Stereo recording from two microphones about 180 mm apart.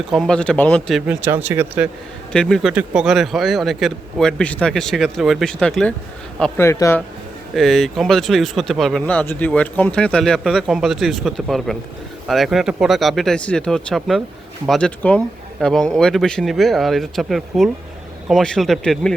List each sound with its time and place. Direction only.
0.1 s speech: 5° left (ahead or behind)
1.1 s speech: 10° right (ahead or behind)
2.3 s speech: 5° left (ahead or behind)
6.6 s a man's voice: 15° left (ahead or behind)
7.5 s speech: centre (ahead or behind)